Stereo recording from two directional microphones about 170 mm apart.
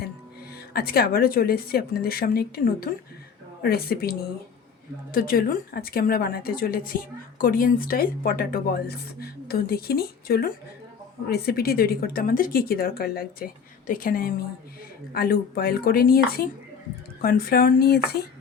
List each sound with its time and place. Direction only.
0.7 s a woman's voice: 65° left (ahead or behind)